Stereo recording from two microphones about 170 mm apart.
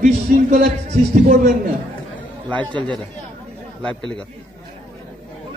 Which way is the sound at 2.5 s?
5° left (ahead or behind).